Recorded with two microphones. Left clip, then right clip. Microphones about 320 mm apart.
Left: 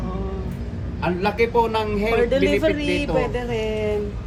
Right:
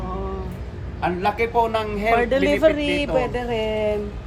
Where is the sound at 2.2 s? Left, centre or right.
Right.